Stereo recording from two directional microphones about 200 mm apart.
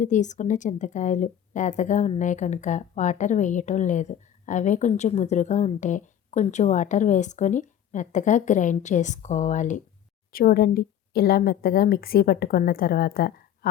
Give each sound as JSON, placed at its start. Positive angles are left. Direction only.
{"t": 0.0, "sound": "a woman's voice", "side_deg": 35}